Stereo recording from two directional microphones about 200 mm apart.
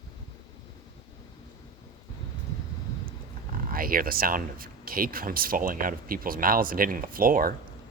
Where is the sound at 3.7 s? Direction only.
45° right (ahead or behind).